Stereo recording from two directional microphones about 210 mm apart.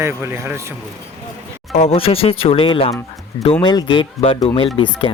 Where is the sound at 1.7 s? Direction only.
30° left (ahead or behind).